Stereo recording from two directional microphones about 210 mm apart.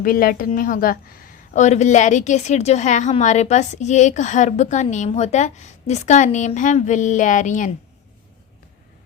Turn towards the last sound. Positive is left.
turn(degrees=35)  # may be behind; listen again after turning